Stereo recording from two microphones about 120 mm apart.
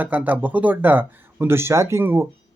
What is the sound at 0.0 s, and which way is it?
Speech, 15° right (ahead or behind).